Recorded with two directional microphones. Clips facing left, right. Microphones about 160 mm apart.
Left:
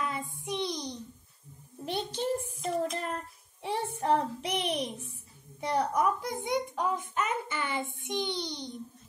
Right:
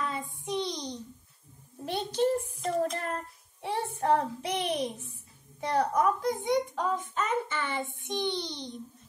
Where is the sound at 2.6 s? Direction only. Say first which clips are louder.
Right 2 dB; 15° left (ahead or behind).